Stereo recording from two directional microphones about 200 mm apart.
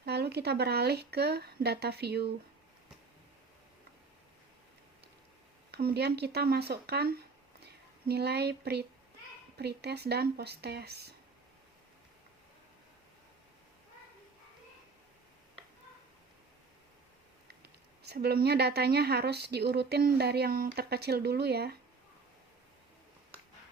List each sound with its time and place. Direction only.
0.0 s a woman's voice: 55° right (ahead or behind)
5.7 s a woman's voice: 55° right (ahead or behind)
18.0 s a woman's voice: 55° right (ahead or behind)